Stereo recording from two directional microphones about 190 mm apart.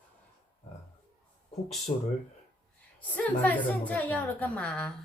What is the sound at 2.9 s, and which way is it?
A woman's voice, 10° left (ahead or behind).